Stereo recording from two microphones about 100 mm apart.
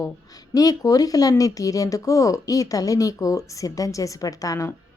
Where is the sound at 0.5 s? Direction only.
40° left (ahead or behind).